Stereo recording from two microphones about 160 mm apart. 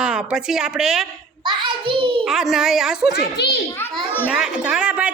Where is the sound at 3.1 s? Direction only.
85° left.